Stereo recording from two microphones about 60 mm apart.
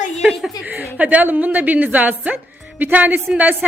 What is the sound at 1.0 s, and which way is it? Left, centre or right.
A woman's voice, right.